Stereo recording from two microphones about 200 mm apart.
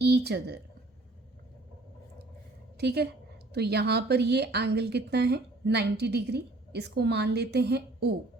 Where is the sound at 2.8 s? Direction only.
55° right (ahead or behind).